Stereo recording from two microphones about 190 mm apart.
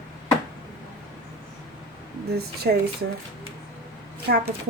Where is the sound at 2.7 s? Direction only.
55° right (ahead or behind).